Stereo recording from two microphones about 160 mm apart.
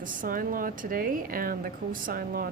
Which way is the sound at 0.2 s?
60° right (ahead or behind).